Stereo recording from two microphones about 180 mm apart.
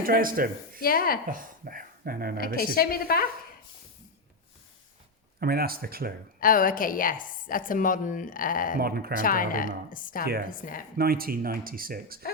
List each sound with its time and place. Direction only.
0.0 s speech: 50° right (ahead or behind)
0.8 s a woman's voice: 55° left (ahead or behind)
1.3 s speech: 50° right (ahead or behind)
2.7 s a woman's voice: 55° left (ahead or behind)
5.4 s speech: 55° right (ahead or behind)
6.4 s a woman's voice: 50° left (ahead or behind)
8.8 s speech: 60° right (ahead or behind)
9.1 s a woman's voice: 50° left (ahead or behind)
10.9 s speech: 55° right (ahead or behind)